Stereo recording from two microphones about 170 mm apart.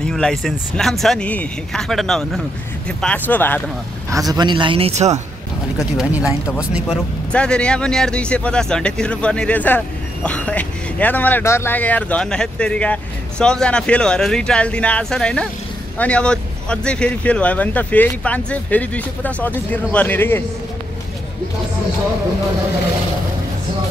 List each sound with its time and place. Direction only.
0.0 s speech: 5° left (ahead or behind)
4.1 s speech: 20° right (ahead or behind); by 5.2 s 40° right (ahead or behind)
5.8 s speech: centre (ahead or behind)
7.3 s speech: 5° left (ahead or behind)